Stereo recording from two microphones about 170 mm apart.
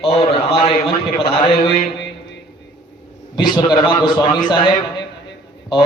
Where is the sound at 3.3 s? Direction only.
25° left (ahead or behind).